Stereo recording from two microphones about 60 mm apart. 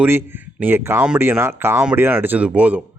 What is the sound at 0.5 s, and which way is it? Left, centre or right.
A man's voice, right.